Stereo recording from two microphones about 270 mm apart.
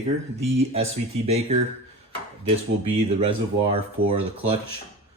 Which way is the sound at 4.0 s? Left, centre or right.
Right.